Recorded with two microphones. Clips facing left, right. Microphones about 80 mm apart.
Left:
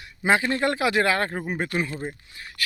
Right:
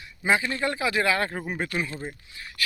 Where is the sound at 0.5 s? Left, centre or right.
Left.